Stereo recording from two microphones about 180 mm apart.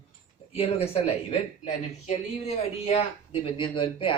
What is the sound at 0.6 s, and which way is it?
Speech, 35° left (ahead or behind).